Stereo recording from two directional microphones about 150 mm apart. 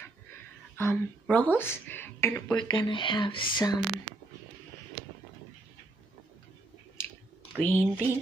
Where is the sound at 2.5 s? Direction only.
30° left (ahead or behind).